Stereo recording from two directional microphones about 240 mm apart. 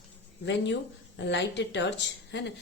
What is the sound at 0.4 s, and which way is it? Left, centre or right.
A woman's voice, left.